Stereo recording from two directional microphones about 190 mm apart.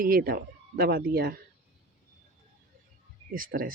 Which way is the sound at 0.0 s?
50° right (ahead or behind).